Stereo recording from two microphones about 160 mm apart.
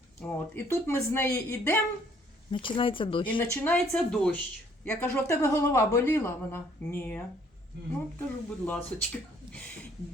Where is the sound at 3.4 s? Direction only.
15° left (ahead or behind).